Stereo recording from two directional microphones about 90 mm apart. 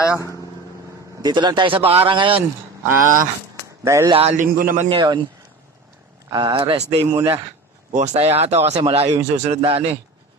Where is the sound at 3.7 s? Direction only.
30° right (ahead or behind).